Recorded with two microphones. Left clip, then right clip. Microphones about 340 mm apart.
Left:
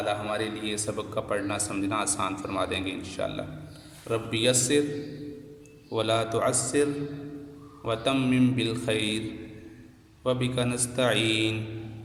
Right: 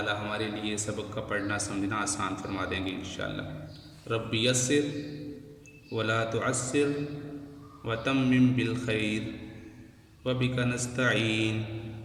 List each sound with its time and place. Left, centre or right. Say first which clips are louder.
0.0 s a man's voice: left 3 dB; centre
5.9 s a man's voice: left 3 dB; centre
7.9 s a man's voice: left 2 dB; centre
10.2 s a man's voice: left 3 dB; centre